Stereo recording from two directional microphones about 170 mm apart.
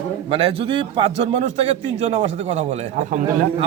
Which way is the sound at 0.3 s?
30° right (ahead or behind).